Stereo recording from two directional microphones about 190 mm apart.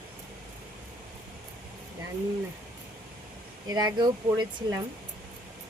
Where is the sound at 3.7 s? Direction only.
20° right (ahead or behind).